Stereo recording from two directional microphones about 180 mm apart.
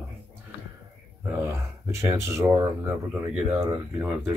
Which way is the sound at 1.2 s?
15° right (ahead or behind).